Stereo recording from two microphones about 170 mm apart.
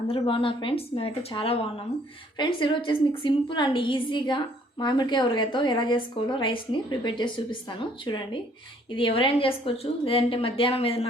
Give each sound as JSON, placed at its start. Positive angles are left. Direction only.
{"t": 0.1, "sound": "a woman's voice", "side_deg": 30}